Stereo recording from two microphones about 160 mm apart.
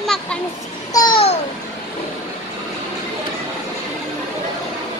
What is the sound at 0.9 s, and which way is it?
Speech, 25° left (ahead or behind).